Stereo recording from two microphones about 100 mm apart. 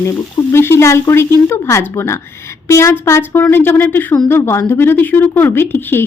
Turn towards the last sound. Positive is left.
turn(degrees=20)  # may be behind; listen again after turning